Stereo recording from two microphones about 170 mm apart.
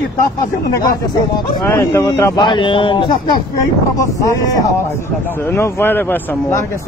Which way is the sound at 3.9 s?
20° left (ahead or behind).